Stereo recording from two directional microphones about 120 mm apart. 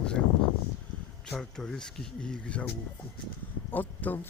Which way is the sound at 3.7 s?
15° left (ahead or behind).